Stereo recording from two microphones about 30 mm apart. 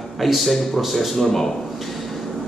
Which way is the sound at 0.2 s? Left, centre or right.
Centre.